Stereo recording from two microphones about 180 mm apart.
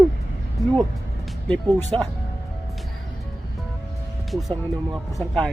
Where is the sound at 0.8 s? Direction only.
Centre (ahead or behind).